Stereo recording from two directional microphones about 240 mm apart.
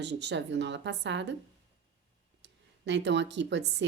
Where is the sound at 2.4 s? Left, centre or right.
Right.